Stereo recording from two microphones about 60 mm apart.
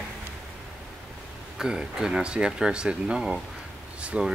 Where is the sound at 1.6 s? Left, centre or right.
Centre.